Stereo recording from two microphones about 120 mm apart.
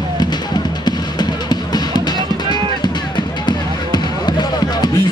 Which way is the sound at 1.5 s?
35° left (ahead or behind).